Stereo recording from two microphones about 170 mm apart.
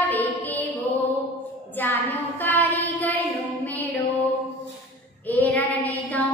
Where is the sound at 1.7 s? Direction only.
10° left (ahead or behind).